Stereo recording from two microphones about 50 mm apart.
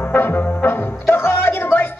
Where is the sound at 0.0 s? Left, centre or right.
Left.